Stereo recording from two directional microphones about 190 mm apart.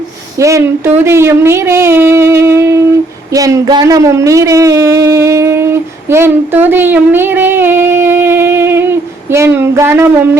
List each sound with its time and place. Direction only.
0.3 s speech: 15° right (ahead or behind)